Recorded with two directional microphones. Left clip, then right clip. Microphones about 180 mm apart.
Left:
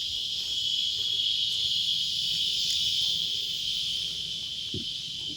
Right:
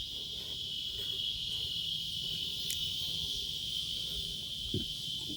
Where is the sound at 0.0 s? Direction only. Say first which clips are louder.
Left 9 dB; 50° right (ahead or behind).